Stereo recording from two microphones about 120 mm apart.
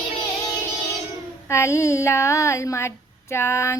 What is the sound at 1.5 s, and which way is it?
Female singing, 25° left (ahead or behind).